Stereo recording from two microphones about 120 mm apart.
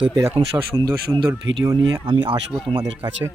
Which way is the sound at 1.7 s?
30° right (ahead or behind).